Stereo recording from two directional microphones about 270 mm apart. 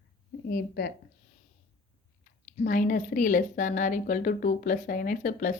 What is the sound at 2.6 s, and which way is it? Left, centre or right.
A woman's voice, left.